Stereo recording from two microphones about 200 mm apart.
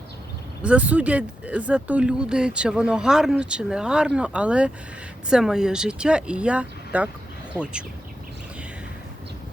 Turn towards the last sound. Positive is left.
turn(degrees=-10)  # may be behind; listen again after turning